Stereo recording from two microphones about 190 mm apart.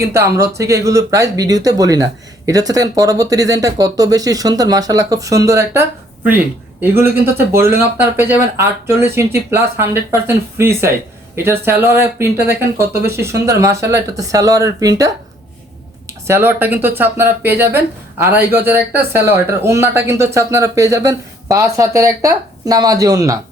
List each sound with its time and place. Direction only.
0.0 s speech: 15° right (ahead or behind)
16.2 s speech: 10° right (ahead or behind)